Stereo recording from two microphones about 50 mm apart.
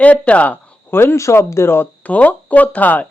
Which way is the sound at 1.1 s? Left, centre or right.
Left.